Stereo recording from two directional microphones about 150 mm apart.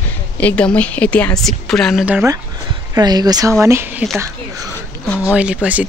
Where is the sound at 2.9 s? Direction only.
25° right (ahead or behind).